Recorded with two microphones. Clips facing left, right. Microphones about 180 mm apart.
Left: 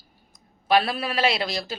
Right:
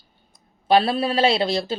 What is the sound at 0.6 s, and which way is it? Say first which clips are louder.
Speech: right 4 dB; 30° right (ahead or behind).